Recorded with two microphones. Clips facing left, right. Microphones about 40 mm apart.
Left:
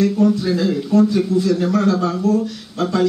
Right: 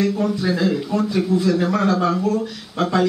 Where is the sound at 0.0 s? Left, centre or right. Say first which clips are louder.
Left 4 dB; centre.